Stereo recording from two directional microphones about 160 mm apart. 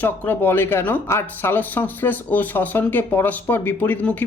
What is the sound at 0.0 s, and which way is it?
Speech, 10° left (ahead or behind).